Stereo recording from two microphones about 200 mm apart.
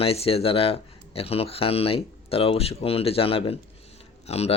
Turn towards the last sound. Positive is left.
turn(degrees=30)  # may be behind; listen again after turning